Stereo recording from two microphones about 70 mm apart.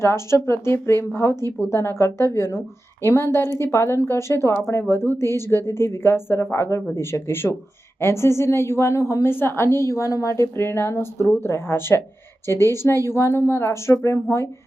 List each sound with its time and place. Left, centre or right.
0.0 s a woman's voice: left